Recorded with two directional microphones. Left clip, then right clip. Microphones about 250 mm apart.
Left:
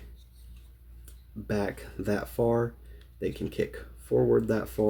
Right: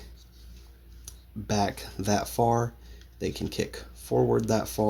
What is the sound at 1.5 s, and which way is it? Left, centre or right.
Speech, right.